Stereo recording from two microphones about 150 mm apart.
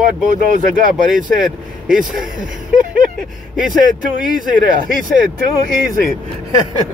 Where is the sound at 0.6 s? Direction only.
60° right (ahead or behind).